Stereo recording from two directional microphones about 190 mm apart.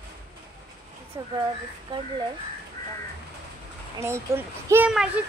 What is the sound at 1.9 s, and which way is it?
Speech, 25° right (ahead or behind).